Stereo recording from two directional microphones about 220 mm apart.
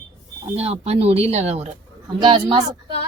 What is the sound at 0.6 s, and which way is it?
A woman's voice, 30° right (ahead or behind).